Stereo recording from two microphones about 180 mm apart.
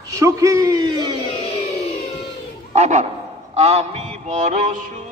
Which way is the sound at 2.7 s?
40° right (ahead or behind).